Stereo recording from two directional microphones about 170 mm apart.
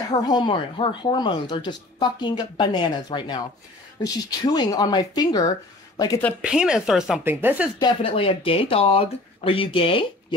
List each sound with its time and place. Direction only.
0.1 s speech: 25° left (ahead or behind)
6.4 s a woman's voice: 5° right (ahead or behind)
7.8 s speech: 35° left (ahead or behind)